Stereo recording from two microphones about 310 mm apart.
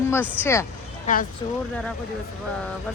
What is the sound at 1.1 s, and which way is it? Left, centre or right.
Speech, left.